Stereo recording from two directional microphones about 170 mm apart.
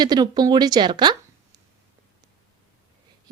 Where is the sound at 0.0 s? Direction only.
25° right (ahead or behind).